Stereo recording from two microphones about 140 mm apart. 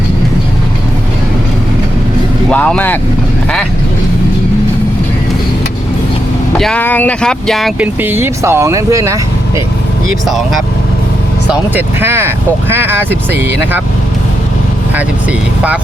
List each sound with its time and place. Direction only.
2.5 s speech: 10° left (ahead or behind)
6.6 s speech: 10° left (ahead or behind)
7.8 s speech: 15° right (ahead or behind)
11.5 s speech: 15° right (ahead or behind)
14.9 s speech: 10° right (ahead or behind)